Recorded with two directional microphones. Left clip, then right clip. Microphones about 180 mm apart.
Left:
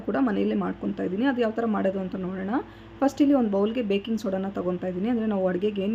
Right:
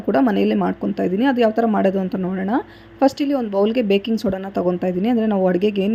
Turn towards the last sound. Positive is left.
turn(degrees=-35)  # may be behind; listen again after turning